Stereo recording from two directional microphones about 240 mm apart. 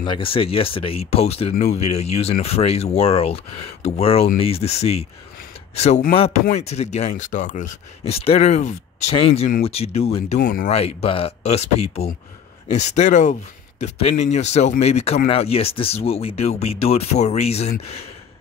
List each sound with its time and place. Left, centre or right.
0.0 s speech: left